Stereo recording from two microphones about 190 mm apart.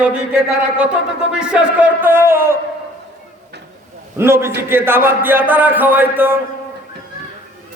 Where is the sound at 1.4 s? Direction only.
5° right (ahead or behind).